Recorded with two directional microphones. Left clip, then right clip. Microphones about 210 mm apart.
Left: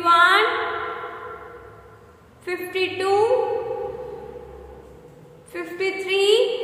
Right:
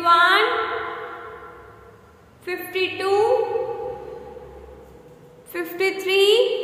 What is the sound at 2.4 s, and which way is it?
Speech, centre (ahead or behind).